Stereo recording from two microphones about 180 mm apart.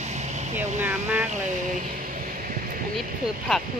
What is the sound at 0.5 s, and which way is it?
Speech, 10° right (ahead or behind).